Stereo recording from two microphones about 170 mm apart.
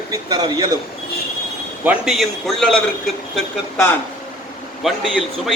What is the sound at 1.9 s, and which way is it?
A man's voice, centre (ahead or behind).